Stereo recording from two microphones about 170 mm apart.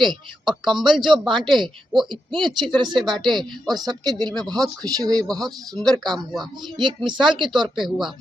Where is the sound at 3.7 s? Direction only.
25° right (ahead or behind).